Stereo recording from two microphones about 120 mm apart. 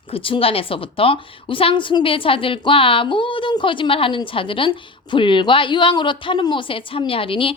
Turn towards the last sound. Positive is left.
turn(degrees=50)  # may be behind; listen again after turning